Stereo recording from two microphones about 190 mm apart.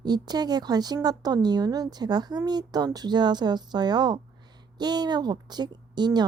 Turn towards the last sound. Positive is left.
turn(degrees=-20)  # may be behind; listen again after turning